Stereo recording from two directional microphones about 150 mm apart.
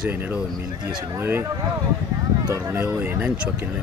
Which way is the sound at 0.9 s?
30° right (ahead or behind).